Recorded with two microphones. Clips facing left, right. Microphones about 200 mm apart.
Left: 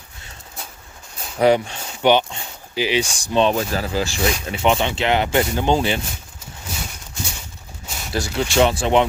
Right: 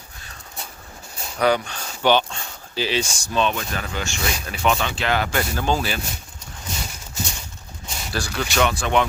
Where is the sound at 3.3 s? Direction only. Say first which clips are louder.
Left 5 dB; 30° left (ahead or behind).